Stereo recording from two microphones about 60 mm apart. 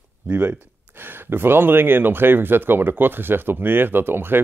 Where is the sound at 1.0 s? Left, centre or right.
Right.